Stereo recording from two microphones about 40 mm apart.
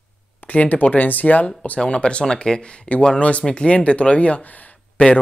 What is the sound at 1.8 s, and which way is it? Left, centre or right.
Speech, left.